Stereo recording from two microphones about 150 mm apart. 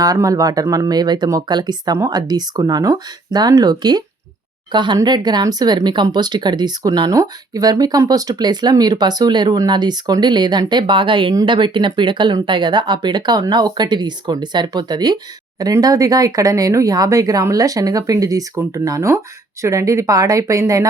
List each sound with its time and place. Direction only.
0.0 s speech: 25° right (ahead or behind)